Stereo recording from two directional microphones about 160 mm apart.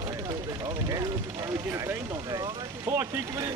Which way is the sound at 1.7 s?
15° right (ahead or behind).